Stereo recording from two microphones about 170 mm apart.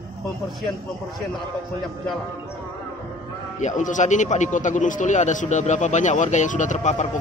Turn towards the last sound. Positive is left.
turn(degrees=45)  # may be behind; listen again after turning